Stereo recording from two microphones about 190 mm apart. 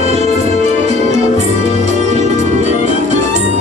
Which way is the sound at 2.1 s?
35° right (ahead or behind).